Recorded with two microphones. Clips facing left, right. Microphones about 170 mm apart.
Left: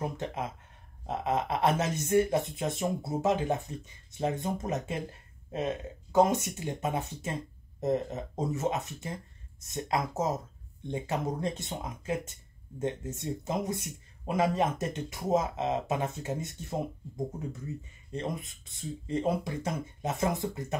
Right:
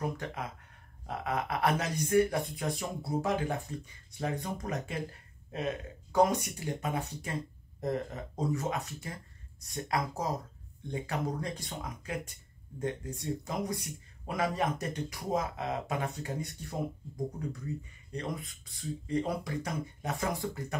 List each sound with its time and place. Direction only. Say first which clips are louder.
0.0 s speech: left 2 dB; 25° left (ahead or behind)
18.1 s speech: left 2 dB; 20° left (ahead or behind)